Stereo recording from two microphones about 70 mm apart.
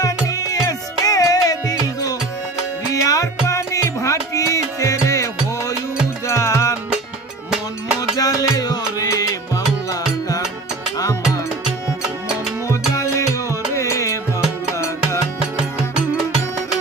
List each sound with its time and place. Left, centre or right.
0.0 s music: left
8.1 s music: left
10.9 s music: left
12.6 s music: left